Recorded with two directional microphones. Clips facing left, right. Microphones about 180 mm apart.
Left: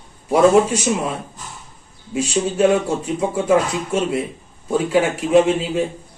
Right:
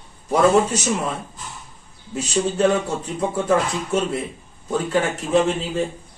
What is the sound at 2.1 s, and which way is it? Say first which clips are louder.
Speech: left 2 dB; 10° left (ahead or behind).